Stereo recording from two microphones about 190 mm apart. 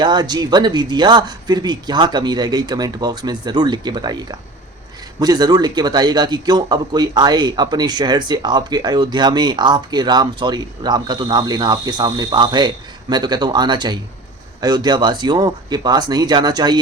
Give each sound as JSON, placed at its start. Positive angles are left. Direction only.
{"t": 0.0, "sound": "a man's voice", "side_deg": -20}